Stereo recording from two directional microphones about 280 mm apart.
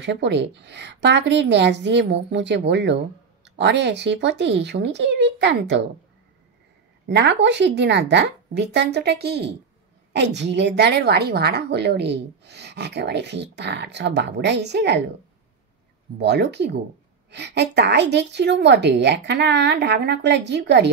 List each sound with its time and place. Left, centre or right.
0.0 s a woman's voice: right
7.1 s a woman's voice: right
16.2 s a woman's voice: right